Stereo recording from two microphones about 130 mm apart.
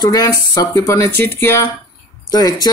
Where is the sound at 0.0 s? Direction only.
25° left (ahead or behind).